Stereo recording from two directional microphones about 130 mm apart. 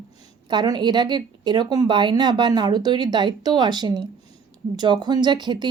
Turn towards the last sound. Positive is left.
turn(degrees=-35)  # may be behind; listen again after turning